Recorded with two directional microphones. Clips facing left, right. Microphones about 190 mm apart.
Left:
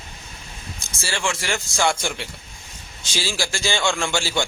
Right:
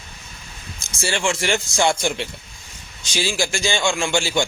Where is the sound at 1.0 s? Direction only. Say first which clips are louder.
Right 4 dB; 20° right (ahead or behind).